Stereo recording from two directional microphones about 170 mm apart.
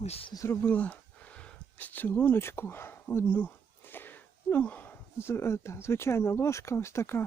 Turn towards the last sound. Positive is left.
turn(degrees=15)  # may be behind; listen again after turning